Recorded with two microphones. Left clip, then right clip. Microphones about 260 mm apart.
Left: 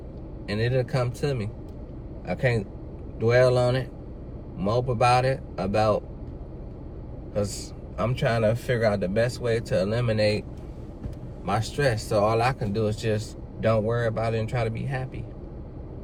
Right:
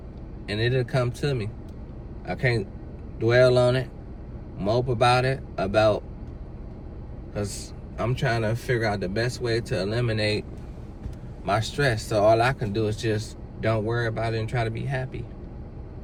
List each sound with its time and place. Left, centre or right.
0.4 s speech: centre
7.3 s speech: centre
11.4 s speech: centre